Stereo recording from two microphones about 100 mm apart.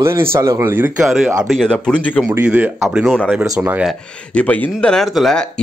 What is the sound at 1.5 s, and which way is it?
Speech, 5° left (ahead or behind).